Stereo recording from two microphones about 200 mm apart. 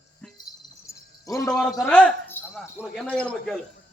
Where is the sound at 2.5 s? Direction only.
Centre (ahead or behind).